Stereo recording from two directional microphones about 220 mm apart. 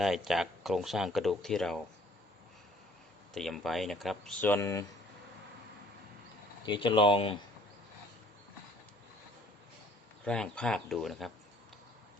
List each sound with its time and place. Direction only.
0.0 s speech: centre (ahead or behind)
3.3 s speech: centre (ahead or behind)
6.7 s speech: 20° left (ahead or behind)
10.2 s speech: 5° left (ahead or behind)